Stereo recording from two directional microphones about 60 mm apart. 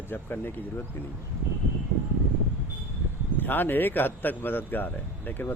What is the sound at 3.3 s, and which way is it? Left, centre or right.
A man's voice, left.